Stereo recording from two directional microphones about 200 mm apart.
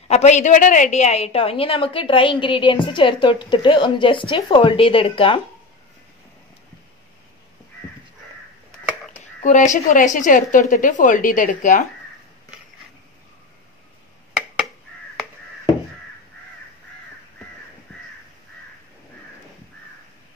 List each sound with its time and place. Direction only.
0.1 s a woman's voice: 35° left (ahead or behind)
9.4 s a woman's voice: 40° left (ahead or behind)